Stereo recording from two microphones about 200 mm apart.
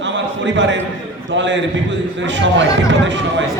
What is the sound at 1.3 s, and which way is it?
Speech, 65° right (ahead or behind).